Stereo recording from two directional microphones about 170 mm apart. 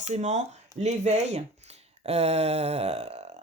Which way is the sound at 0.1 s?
45° right (ahead or behind).